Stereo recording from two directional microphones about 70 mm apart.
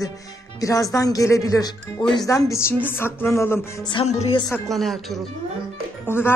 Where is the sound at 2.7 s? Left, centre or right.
Left.